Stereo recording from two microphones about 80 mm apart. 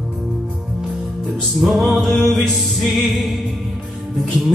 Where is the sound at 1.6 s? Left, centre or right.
Centre.